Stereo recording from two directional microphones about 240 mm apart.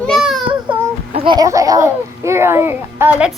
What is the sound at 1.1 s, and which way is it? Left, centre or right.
Speech, centre.